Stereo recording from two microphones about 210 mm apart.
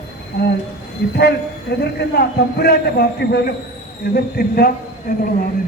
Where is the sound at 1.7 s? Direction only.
50° left (ahead or behind).